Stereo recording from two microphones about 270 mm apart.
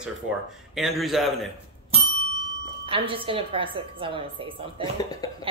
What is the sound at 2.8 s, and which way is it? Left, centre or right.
A woman's voice, centre.